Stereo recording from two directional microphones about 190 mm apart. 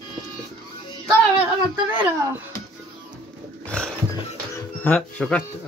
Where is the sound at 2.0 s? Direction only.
10° right (ahead or behind).